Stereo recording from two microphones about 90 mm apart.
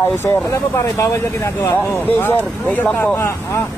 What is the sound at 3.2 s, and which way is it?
Speech, 30° left (ahead or behind).